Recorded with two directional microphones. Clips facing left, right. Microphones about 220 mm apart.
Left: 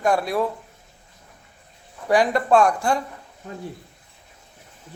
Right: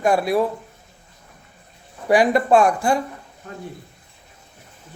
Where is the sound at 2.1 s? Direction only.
10° right (ahead or behind).